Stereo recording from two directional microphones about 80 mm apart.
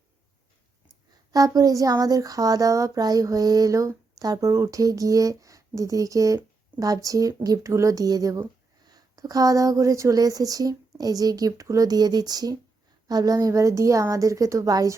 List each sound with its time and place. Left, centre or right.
1.3 s speech: right